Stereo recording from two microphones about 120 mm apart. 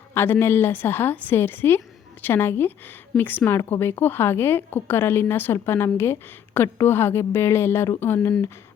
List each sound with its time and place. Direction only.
0.1 s a woman's voice: 20° left (ahead or behind)